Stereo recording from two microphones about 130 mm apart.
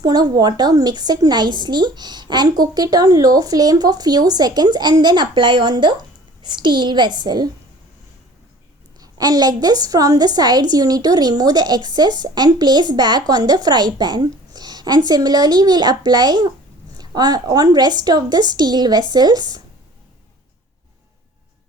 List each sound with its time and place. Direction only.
0.0 s a woman's voice: 30° right (ahead or behind)
9.0 s a woman's voice: 30° right (ahead or behind)